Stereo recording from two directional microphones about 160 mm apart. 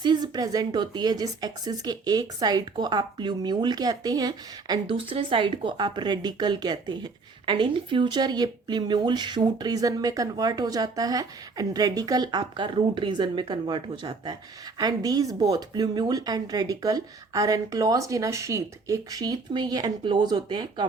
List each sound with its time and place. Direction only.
0.0 s speech: 25° right (ahead or behind)